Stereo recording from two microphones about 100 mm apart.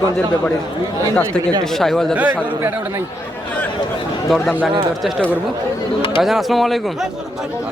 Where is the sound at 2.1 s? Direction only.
20° right (ahead or behind).